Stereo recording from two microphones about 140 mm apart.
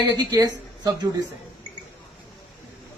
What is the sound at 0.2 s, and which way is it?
Speech, 25° right (ahead or behind).